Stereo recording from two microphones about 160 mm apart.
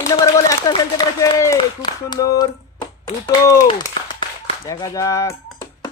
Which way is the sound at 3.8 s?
30° left (ahead or behind).